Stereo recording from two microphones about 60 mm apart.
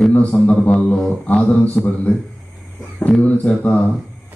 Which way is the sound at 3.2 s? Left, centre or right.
Left.